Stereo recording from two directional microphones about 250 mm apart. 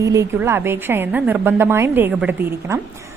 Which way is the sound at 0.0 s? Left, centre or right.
Centre.